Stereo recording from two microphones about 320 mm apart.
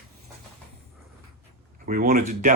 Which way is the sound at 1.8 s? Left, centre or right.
Right.